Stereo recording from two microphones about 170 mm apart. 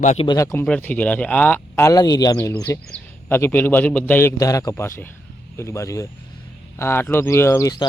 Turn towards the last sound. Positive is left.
turn(degrees=20)  # may be behind; listen again after turning